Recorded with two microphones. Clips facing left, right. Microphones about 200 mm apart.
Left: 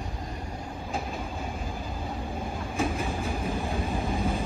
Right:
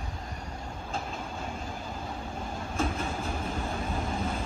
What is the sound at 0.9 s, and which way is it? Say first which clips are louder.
Train: left 3 dB; 15° left (ahead or behind).